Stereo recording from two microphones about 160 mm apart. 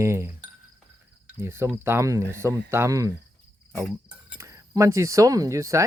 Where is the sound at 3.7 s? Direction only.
10° right (ahead or behind).